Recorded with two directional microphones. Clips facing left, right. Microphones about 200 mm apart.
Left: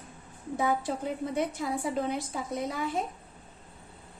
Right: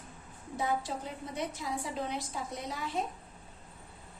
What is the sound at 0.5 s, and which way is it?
A woman's voice, 55° left (ahead or behind).